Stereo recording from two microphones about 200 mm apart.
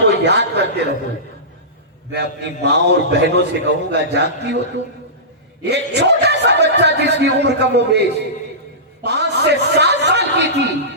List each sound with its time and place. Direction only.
0.0 s a sound: 60° right (ahead or behind)
2.1 s a man's voice: 60° right (ahead or behind)
9.0 s a man's voice: 60° right (ahead or behind)